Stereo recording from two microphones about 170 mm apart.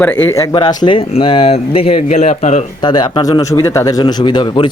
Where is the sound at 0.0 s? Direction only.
10° left (ahead or behind); by 2.6 s 45° left (ahead or behind).